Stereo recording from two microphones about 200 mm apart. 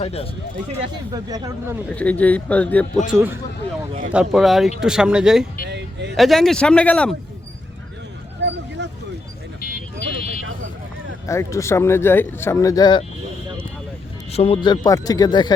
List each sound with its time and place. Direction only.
0.0 s speech: 30° left (ahead or behind)
1.1 s speech: 15° right (ahead or behind)
2.0 s speech: 5° left (ahead or behind)
3.1 s speech: 10° right (ahead or behind)
5.6 s a sound: 60° right (ahead or behind)
6.1 s speech: centre (ahead or behind)
8.4 s a sound: 60° right (ahead or behind)
11.3 s speech: 15° left (ahead or behind)
14.3 s speech: 30° left (ahead or behind)